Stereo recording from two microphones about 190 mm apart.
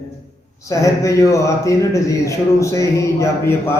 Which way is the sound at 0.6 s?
15° left (ahead or behind).